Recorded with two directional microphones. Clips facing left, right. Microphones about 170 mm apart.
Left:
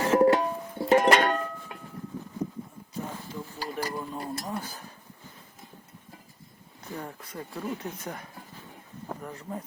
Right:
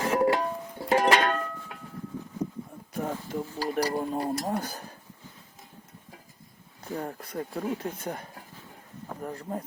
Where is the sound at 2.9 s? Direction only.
60° right (ahead or behind).